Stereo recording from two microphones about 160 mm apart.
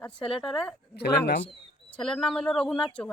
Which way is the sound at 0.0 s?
5° left (ahead or behind).